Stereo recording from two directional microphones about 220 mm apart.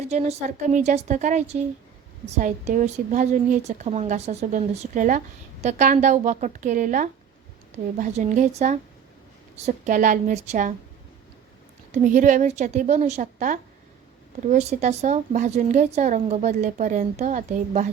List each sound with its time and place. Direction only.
0.1 s speech: 30° right (ahead or behind)
11.9 s speech: 35° right (ahead or behind)